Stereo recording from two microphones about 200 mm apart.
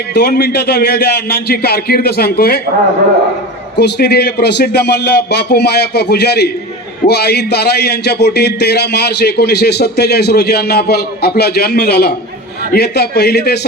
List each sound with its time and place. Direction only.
0.1 s a man's voice: 50° left (ahead or behind)
3.8 s a man's voice: 55° left (ahead or behind)